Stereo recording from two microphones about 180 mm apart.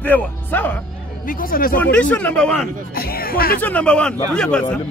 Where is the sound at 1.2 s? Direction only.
50° left (ahead or behind).